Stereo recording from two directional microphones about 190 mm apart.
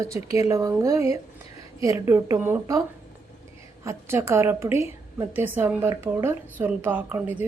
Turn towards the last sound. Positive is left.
turn(degrees=-10)  # may be behind; listen again after turning